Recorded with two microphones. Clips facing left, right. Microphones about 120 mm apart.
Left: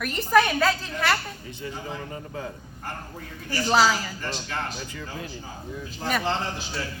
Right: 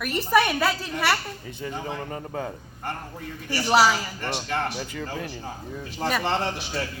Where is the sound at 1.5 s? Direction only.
40° right (ahead or behind).